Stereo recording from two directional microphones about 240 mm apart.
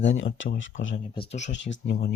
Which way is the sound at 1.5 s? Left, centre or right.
Left.